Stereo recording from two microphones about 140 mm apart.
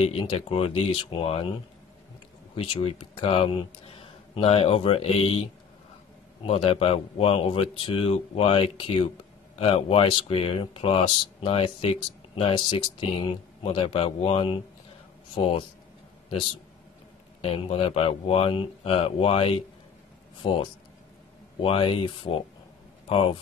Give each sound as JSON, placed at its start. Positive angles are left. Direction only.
{"t": 0.0, "sound": "speech", "side_deg": 40}
{"t": 2.5, "sound": "speech", "side_deg": 40}
{"t": 6.4, "sound": "speech", "side_deg": 45}
{"t": 17.4, "sound": "speech", "side_deg": 40}